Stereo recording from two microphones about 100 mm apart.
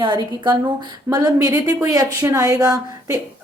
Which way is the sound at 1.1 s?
35° right (ahead or behind).